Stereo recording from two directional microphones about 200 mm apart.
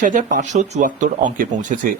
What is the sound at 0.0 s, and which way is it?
Speech, 40° right (ahead or behind).